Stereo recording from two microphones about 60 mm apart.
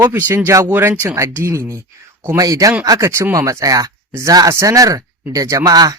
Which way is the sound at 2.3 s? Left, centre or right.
Right.